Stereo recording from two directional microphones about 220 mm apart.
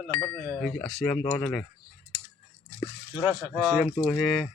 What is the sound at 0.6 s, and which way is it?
Speech, 5° left (ahead or behind).